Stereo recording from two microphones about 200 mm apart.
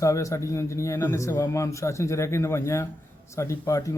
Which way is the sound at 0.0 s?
15° left (ahead or behind).